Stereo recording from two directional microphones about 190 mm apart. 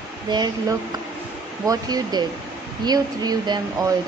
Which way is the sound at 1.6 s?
20° right (ahead or behind).